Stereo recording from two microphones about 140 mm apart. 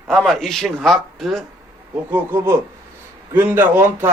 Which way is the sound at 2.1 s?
20° right (ahead or behind).